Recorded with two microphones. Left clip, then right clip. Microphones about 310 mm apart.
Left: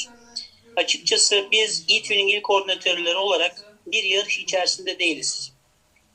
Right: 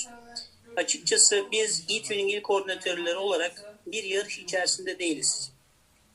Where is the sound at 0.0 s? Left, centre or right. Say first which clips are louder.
Left 6 dB; centre.